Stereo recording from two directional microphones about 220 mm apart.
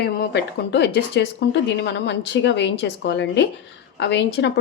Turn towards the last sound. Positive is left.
turn(degrees=50)  # may be behind; listen again after turning